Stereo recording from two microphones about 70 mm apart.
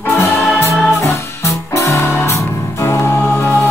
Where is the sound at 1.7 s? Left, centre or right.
Left.